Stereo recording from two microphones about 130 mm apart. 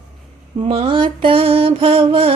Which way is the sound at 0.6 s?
45° right (ahead or behind).